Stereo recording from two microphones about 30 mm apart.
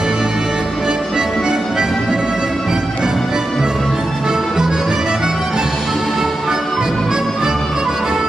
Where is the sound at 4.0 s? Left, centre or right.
Right.